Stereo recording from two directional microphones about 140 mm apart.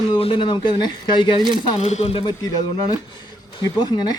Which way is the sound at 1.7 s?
50° left (ahead or behind).